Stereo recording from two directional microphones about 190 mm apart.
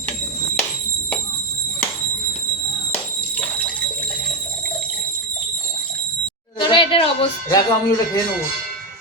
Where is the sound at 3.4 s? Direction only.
5° left (ahead or behind).